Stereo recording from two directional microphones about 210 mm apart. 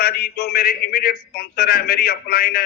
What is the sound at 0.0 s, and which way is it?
A man's voice, 45° left (ahead or behind).